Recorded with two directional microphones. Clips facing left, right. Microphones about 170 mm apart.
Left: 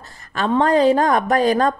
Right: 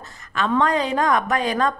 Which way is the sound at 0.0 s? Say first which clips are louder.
Left 2 dB; 35° left (ahead or behind).